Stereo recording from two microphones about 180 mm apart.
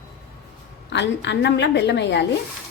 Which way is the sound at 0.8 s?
75° left (ahead or behind).